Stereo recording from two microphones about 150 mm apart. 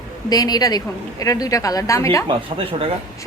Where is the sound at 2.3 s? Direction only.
40° right (ahead or behind).